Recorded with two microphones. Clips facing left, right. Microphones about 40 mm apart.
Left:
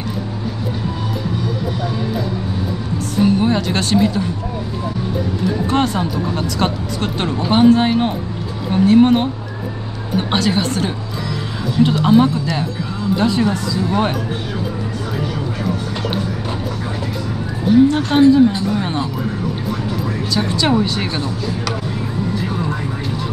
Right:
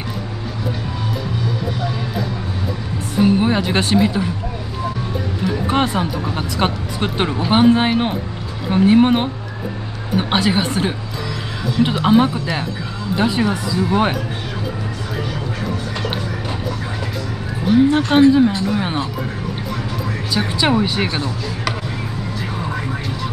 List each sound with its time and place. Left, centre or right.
3.2 s speech: centre
5.5 s speech: centre
17.6 s speech: centre
20.3 s speech: centre